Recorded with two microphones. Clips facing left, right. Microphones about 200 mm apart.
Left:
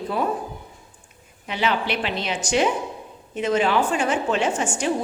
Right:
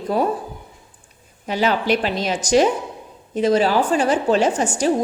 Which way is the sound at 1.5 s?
40° right (ahead or behind).